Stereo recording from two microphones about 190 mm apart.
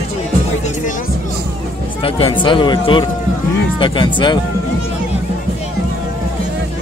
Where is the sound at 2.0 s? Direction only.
25° left (ahead or behind).